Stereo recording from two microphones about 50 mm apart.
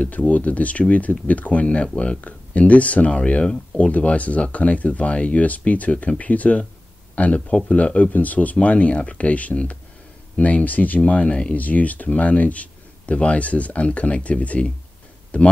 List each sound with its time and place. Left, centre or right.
0.0 s speech: left